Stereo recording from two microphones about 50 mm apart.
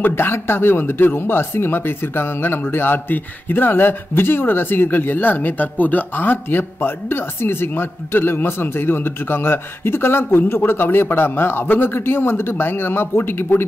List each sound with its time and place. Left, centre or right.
0.0 s speech: left